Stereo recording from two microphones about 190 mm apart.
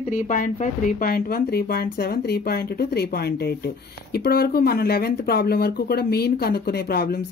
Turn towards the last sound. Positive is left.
turn(degrees=55)  # may be behind; listen again after turning